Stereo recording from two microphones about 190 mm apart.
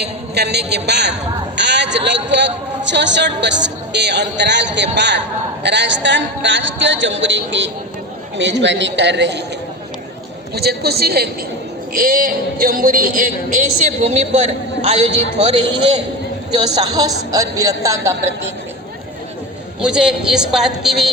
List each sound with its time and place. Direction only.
0.0 s a man's voice: 60° right (ahead or behind)
10.5 s a man's voice: 55° right (ahead or behind); by 18.1 s 15° right (ahead or behind)
19.8 s a man's voice: 5° right (ahead or behind)